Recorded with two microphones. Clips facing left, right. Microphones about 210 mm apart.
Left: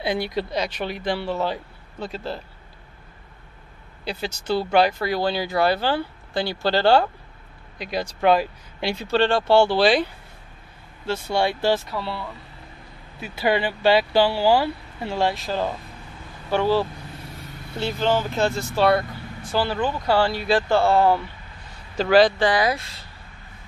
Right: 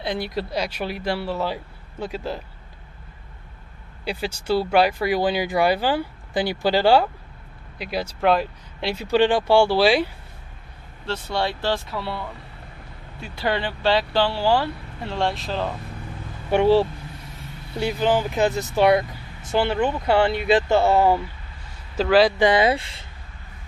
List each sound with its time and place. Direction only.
0.0 s speech: centre (ahead or behind)
4.0 s speech: 10° right (ahead or behind)
9.0 s speech: 15° right (ahead or behind)
11.1 s speech: 10° left (ahead or behind)
13.2 s speech: 5° left (ahead or behind)
16.4 s speech: 25° right (ahead or behind)
17.7 s speech: 15° right (ahead or behind)
21.9 s a man's voice: centre (ahead or behind)
22.4 s speech: 25° right (ahead or behind)